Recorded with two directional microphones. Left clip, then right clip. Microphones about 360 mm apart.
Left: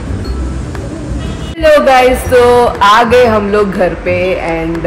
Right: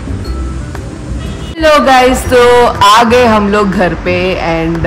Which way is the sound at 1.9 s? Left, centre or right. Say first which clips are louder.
Even; centre.